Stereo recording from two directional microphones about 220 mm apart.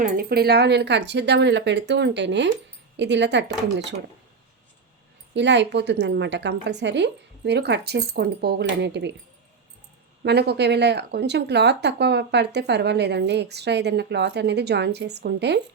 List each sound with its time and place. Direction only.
0.0 s speech: 45° right (ahead or behind)
5.3 s speech: 55° right (ahead or behind)
10.2 s speech: 50° right (ahead or behind)